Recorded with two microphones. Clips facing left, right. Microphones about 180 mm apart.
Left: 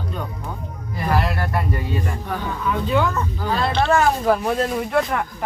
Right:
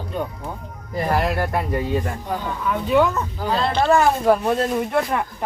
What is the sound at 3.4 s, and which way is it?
Speech, 10° right (ahead or behind).